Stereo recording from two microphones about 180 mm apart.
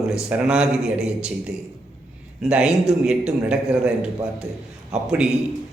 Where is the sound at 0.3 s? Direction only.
5° right (ahead or behind).